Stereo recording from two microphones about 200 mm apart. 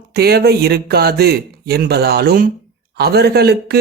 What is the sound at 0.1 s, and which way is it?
Speech, 55° right (ahead or behind).